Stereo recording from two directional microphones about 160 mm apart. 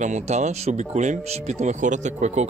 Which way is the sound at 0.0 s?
50° right (ahead or behind).